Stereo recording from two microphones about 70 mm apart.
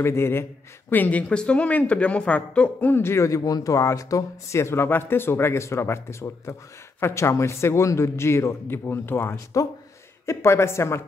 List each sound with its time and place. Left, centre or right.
0.0 s speech: left; by 2.9 s centre
2.9 s speech: left
3.3 s speech: left